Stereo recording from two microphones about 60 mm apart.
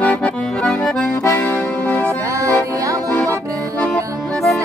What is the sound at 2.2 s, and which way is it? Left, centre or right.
Music, right.